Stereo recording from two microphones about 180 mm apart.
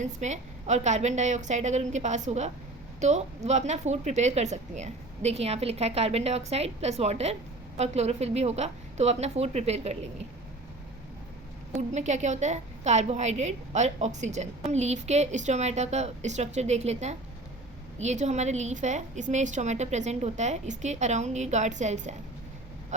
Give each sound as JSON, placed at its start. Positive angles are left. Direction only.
{"t": 0.0, "sound": "a woman's voice", "side_deg": -40}
{"t": 11.9, "sound": "a woman's voice", "side_deg": -40}